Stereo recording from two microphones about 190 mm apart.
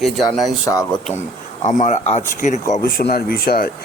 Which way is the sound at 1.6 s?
35° left (ahead or behind).